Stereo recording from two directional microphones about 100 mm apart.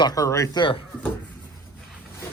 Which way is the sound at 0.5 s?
55° left (ahead or behind).